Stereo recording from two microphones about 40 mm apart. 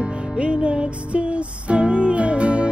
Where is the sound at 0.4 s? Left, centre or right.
Right.